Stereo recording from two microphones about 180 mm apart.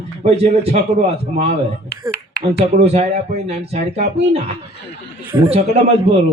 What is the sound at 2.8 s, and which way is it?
A man's voice, 35° right (ahead or behind).